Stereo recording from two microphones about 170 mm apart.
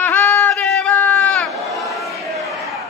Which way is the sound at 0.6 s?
5° left (ahead or behind).